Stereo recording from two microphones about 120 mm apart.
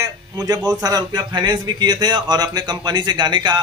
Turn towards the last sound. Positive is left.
turn(degrees=-40)  # may be behind; listen again after turning